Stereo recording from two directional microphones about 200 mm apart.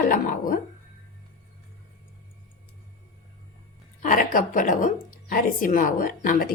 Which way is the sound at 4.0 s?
40° left (ahead or behind).